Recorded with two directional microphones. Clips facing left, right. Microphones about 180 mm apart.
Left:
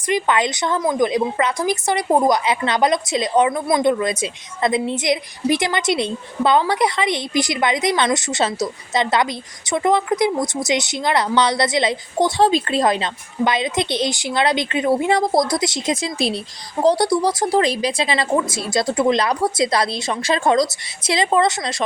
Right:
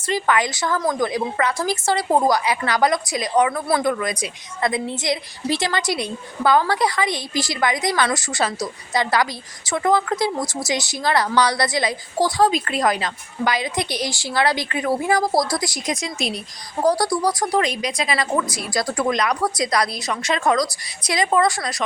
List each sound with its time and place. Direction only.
0.1 s a woman's voice: 20° left (ahead or behind)